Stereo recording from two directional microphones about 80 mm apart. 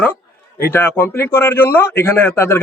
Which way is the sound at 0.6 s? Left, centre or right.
Left.